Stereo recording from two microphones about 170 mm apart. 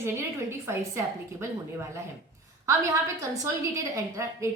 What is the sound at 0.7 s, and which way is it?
Speech, 15° right (ahead or behind).